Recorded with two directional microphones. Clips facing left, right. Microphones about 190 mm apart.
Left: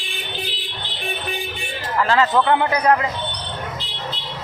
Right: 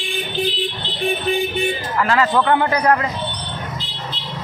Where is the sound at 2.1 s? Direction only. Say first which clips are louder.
Even; 20° left (ahead or behind).